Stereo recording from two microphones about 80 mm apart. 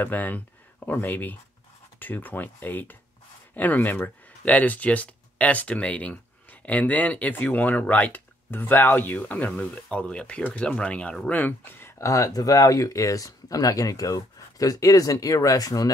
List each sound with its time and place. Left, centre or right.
0.0 s speech: left
12.0 s speech: left